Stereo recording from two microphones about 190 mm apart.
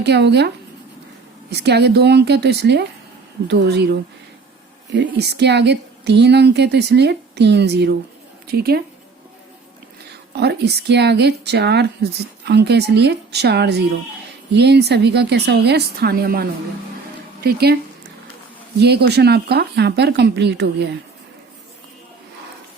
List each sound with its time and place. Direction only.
0.0 s speech: 65° right (ahead or behind)
10.3 s speech: 60° right (ahead or behind)
18.8 s speech: 60° right (ahead or behind)